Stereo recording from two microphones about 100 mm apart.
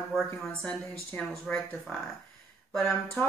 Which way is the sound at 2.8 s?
25° left (ahead or behind).